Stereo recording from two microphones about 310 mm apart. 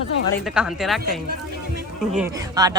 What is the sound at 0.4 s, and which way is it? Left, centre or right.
A woman's voice, centre.